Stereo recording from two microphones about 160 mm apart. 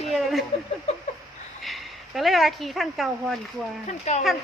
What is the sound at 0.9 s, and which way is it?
Speech, 45° left (ahead or behind).